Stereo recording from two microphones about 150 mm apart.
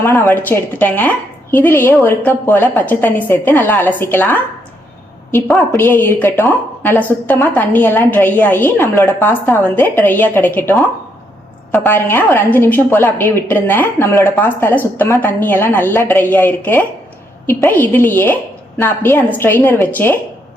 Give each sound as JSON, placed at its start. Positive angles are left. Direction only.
{"t": 0.3, "sound": "a woman's voice", "side_deg": 10}
{"t": 5.7, "sound": "a woman's voice", "side_deg": 15}